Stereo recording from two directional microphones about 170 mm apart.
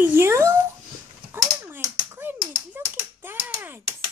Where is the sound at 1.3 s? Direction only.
10° right (ahead or behind).